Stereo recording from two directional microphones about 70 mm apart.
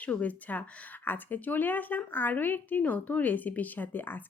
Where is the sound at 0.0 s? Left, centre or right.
Left.